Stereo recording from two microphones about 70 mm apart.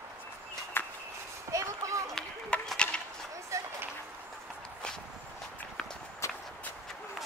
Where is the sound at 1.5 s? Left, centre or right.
Right.